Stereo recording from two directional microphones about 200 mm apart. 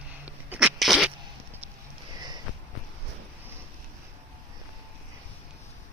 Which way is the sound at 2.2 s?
20° right (ahead or behind).